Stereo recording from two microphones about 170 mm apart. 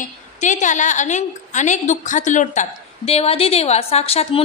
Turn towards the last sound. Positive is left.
turn(degrees=35)  # may be behind; listen again after turning